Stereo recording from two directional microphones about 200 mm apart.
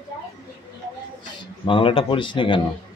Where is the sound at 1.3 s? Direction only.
25° left (ahead or behind).